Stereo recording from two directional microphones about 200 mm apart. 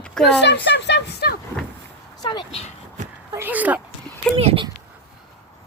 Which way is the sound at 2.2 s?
20° left (ahead or behind).